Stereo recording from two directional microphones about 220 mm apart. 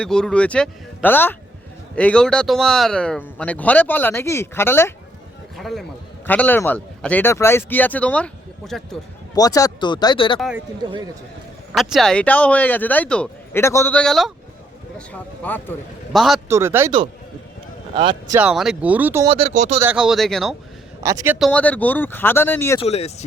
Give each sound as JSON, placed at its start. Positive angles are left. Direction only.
{"t": 0.0, "sound": "a man's voice", "side_deg": 5}
{"t": 9.3, "sound": "speech", "side_deg": 15}
{"t": 11.7, "sound": "speech", "side_deg": 0}
{"t": 16.5, "sound": "speech", "side_deg": -10}
{"t": 17.9, "sound": "speech", "side_deg": -20}
{"t": 18.3, "sound": "speech", "side_deg": -5}
{"t": 19.3, "sound": "speech", "side_deg": -30}
{"t": 19.8, "sound": "speech", "side_deg": -5}
{"t": 21.0, "sound": "speech", "side_deg": -15}
{"t": 21.3, "sound": "speech", "side_deg": 0}
{"t": 22.8, "sound": "speech", "side_deg": 30}